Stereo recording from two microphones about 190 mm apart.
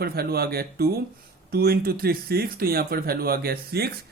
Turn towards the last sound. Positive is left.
turn(degrees=-55)  # may be behind; listen again after turning